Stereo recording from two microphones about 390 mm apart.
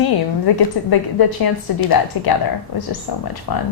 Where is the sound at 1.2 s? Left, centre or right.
Left.